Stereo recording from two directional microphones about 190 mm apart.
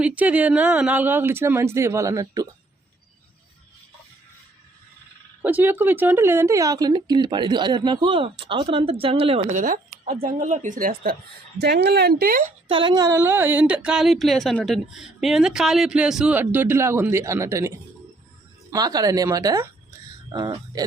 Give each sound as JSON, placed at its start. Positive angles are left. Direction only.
{"t": 0.2, "sound": "speech", "side_deg": -10}
{"t": 5.4, "sound": "speech", "side_deg": -10}
{"t": 11.6, "sound": "speech", "side_deg": -60}
{"t": 12.6, "sound": "speech", "side_deg": -25}